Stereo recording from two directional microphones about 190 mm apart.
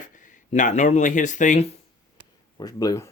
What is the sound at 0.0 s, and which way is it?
Speech, 45° left (ahead or behind).